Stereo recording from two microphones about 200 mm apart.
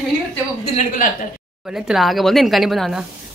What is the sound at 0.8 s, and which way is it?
Speech, 40° left (ahead or behind).